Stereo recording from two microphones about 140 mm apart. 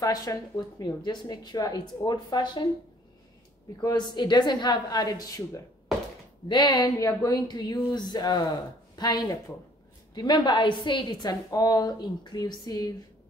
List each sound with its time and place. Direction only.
0.0 s speech: 25° left (ahead or behind)
3.8 s a woman's voice: 30° left (ahead or behind)